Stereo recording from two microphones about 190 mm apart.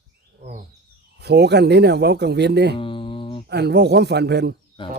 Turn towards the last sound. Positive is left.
turn(degrees=-60)  # may be behind; listen again after turning